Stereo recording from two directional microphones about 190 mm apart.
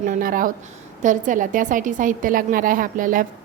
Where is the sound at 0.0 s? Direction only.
45° right (ahead or behind).